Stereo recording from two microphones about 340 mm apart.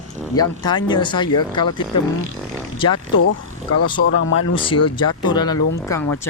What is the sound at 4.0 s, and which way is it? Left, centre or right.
Speech, left.